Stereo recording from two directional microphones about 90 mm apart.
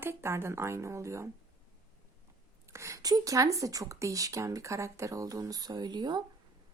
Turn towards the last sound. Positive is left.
turn(degrees=-55)  # may be behind; listen again after turning